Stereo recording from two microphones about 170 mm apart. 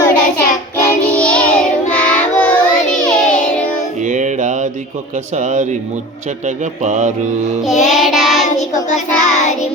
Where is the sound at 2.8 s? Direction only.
45° left (ahead or behind).